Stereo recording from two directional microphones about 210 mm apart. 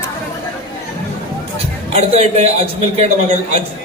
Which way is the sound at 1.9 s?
30° right (ahead or behind).